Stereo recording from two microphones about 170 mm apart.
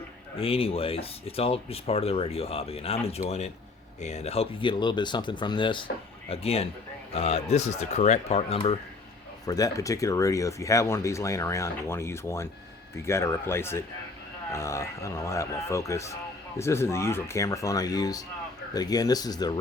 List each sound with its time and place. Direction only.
0.3 s speech: 35° left (ahead or behind)
9.5 s speech: 20° left (ahead or behind)